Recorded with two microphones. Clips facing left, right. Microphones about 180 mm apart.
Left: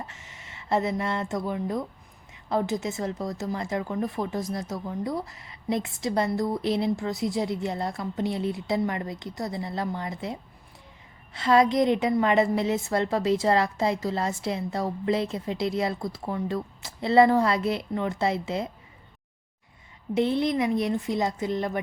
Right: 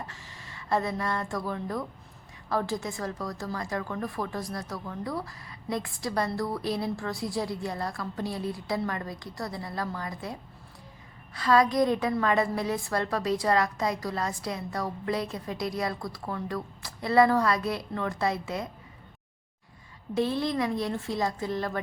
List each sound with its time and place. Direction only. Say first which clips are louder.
0.1 s speech: right 1 dB; 20° left (ahead or behind)
11.3 s speech: left 2 dB; 25° left (ahead or behind)
20.1 s speech: left 3 dB; 20° left (ahead or behind)